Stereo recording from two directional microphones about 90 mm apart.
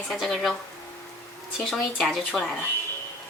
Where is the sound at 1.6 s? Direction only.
5° left (ahead or behind).